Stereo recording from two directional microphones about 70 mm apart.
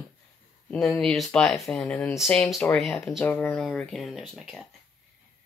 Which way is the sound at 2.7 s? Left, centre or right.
Centre.